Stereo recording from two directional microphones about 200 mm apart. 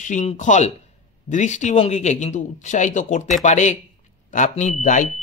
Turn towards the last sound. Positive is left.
turn(degrees=35)  # may be behind; listen again after turning